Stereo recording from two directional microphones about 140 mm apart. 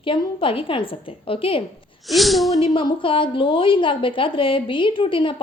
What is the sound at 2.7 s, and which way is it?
Speech, 40° left (ahead or behind).